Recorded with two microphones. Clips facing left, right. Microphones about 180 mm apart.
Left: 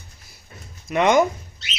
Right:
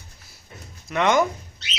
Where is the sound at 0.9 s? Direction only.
20° left (ahead or behind).